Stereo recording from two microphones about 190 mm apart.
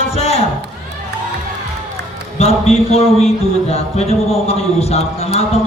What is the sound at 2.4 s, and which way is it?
Speech, 35° left (ahead or behind).